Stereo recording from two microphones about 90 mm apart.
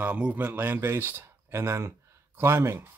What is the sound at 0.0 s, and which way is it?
Speech, 20° right (ahead or behind).